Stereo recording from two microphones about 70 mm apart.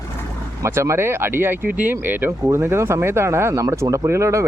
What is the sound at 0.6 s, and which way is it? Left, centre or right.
Speech, right.